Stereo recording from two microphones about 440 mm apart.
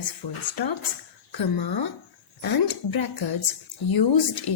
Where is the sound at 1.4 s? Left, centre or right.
Left.